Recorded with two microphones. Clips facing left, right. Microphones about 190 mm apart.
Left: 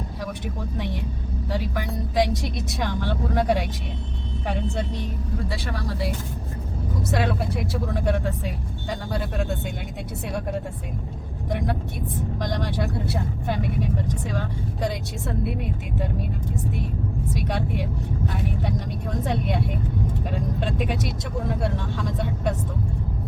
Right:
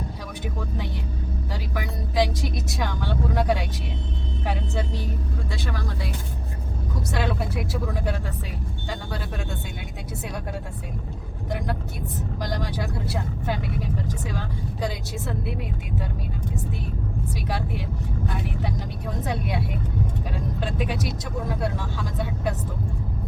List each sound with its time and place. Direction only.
1.5 s speech: centre (ahead or behind)
5.5 s speech: centre (ahead or behind)
7.1 s speech: centre (ahead or behind)
11.4 s speech: centre (ahead or behind)
19.2 s speech: centre (ahead or behind)